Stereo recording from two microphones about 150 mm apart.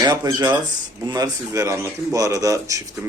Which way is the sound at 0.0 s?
25° right (ahead or behind).